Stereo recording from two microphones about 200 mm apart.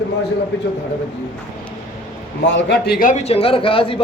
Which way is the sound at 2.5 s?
60° left (ahead or behind).